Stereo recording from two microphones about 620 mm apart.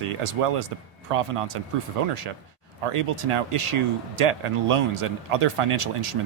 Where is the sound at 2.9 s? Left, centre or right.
Right.